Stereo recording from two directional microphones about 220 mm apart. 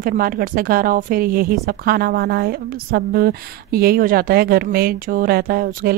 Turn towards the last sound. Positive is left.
turn(degrees=-40)  # may be behind; listen again after turning